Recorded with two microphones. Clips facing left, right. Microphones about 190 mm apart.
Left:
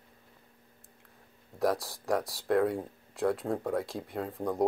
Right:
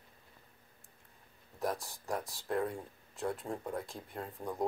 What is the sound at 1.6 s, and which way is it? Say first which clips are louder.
Speech: left 7 dB; 85° left.